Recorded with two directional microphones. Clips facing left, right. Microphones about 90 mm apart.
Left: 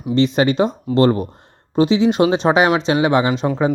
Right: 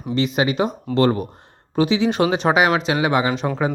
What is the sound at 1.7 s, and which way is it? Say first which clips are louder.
Speech: left 4 dB; 25° left (ahead or behind).